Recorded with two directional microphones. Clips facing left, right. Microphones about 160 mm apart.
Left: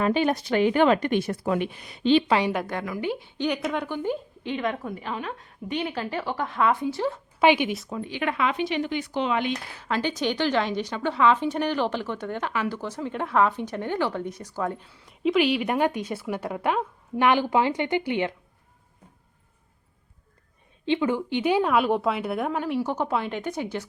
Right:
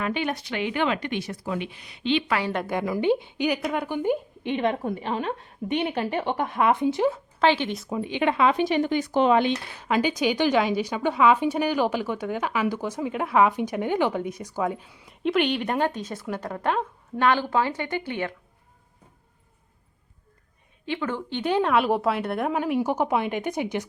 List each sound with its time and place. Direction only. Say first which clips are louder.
0.0 s speech: left 5 dB; 35° left (ahead or behind)
2.2 s a woman's voice: left 4 dB; 25° left (ahead or behind)
2.8 s a woman's voice: right 6 dB; 25° right (ahead or behind)
4.5 s a woman's voice: right 4 dB; 25° right (ahead or behind)
7.3 s speech: left 4 dB; 10° left (ahead or behind)
7.9 s speech: right 4 dB; 20° right (ahead or behind); by 9.4 s 45° right (ahead or behind)
9.9 s a woman's voice: right 3 dB; 10° right (ahead or behind); by 18.3 s 20° left (ahead or behind)
20.8 s a woman's voice: left 5 dB; 20° left (ahead or behind); by 22.5 s centre (ahead or behind)
22.5 s a woman's voice: right 2 dB; 10° right (ahead or behind)